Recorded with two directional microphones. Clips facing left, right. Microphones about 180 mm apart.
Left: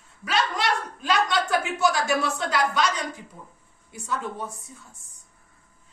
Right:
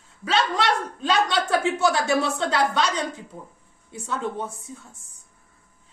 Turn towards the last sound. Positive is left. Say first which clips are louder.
# right 3 dB
turn(degrees=-25)  # may be behind; listen again after turning